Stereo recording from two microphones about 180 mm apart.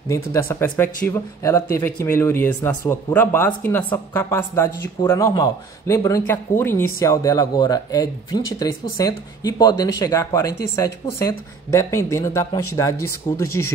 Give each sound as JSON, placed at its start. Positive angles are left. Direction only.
{"t": 0.1, "sound": "speech", "side_deg": 15}
{"t": 13.2, "sound": "speech", "side_deg": 30}